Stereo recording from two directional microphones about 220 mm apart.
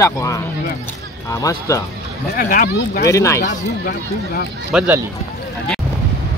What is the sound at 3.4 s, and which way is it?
Speech, 40° left (ahead or behind).